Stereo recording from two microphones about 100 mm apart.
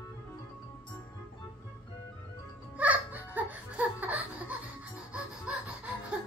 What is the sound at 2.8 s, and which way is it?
Laughter, 15° right (ahead or behind).